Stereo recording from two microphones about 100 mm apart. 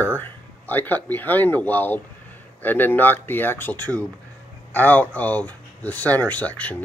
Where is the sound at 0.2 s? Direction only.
20° left (ahead or behind).